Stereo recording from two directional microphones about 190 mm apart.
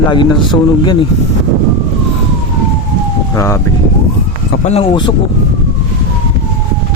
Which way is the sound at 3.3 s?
15° left (ahead or behind).